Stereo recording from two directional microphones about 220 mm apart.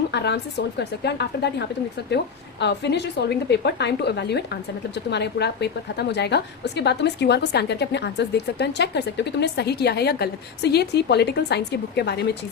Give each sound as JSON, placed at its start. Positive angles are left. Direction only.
{"t": 0.1, "sound": "a woman's voice", "side_deg": 50}